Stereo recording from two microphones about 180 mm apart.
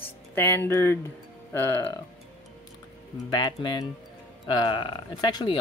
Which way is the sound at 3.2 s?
25° left (ahead or behind).